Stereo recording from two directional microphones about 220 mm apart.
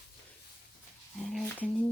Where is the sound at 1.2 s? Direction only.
Centre (ahead or behind).